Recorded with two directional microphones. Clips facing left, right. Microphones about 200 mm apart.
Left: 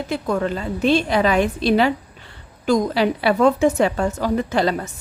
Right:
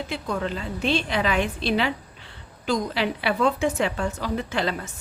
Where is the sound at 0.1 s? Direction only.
45° left (ahead or behind).